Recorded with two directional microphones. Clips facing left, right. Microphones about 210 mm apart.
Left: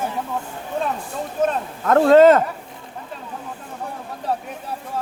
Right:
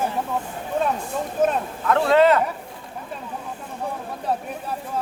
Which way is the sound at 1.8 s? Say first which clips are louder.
Left 6 dB; 45° left (ahead or behind).